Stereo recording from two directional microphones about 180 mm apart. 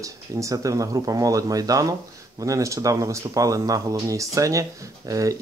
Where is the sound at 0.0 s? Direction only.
20° right (ahead or behind).